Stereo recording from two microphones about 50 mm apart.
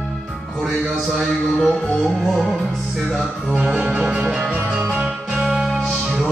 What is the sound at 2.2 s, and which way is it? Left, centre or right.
Music, centre.